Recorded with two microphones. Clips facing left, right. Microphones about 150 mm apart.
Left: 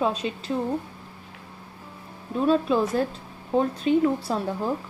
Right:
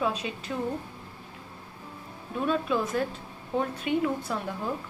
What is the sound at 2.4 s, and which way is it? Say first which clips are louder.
A woman's voice: left 6 dB; 30° left (ahead or behind).